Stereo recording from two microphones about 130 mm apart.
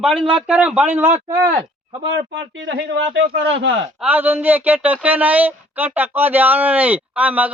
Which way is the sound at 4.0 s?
15° right (ahead or behind).